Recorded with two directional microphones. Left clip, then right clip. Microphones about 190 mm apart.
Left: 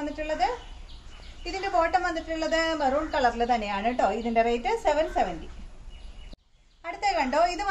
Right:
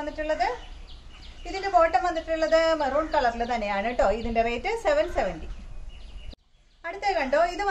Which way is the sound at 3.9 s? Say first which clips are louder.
Even; 35° right (ahead or behind).